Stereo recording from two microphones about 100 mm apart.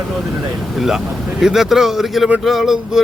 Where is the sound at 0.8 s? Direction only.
5° right (ahead or behind).